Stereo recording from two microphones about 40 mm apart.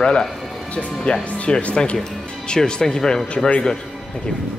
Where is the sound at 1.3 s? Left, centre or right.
Left; by 3.5 s centre.